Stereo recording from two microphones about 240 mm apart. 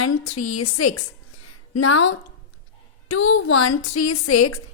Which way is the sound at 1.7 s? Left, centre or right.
Left.